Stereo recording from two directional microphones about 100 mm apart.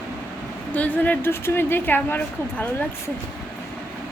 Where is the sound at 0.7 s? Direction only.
15° left (ahead or behind).